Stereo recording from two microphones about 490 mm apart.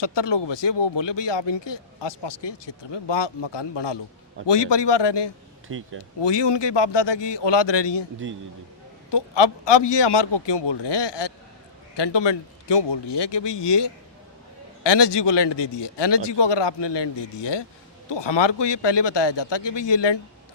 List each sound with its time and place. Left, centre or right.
0.0 s speech: left
5.6 s speech: right
6.2 s speech: left
9.0 s speech: left